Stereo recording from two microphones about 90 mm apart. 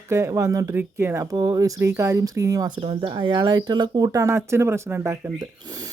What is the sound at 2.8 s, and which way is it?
Speech, 90° right.